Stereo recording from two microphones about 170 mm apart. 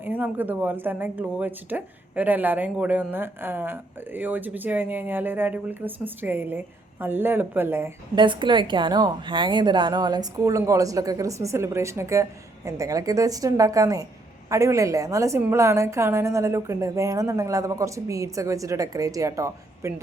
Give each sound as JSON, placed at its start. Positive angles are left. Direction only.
{"t": 0.0, "sound": "speech", "side_deg": -10}
{"t": 8.1, "sound": "a woman's voice", "side_deg": -25}